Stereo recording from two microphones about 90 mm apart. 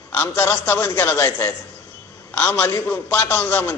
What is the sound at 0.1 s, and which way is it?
A man's voice, 20° left (ahead or behind).